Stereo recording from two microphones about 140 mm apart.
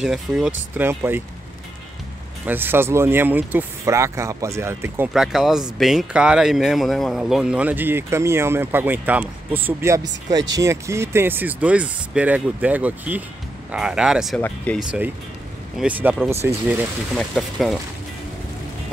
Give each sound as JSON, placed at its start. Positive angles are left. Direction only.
{"t": 0.0, "sound": "speech", "side_deg": -5}
{"t": 2.4, "sound": "speech", "side_deg": -15}
{"t": 5.1, "sound": "speech", "side_deg": -5}
{"t": 14.7, "sound": "speech", "side_deg": 10}
{"t": 15.8, "sound": "speech", "side_deg": -10}
{"t": 17.2, "sound": "speech", "side_deg": 0}